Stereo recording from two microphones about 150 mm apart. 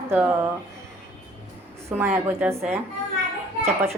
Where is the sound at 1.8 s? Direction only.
15° right (ahead or behind).